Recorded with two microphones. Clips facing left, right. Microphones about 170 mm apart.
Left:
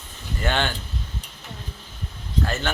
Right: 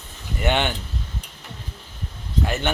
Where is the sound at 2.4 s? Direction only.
15° right (ahead or behind).